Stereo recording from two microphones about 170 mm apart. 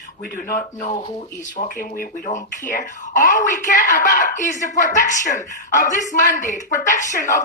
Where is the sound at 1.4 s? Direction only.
50° left (ahead or behind).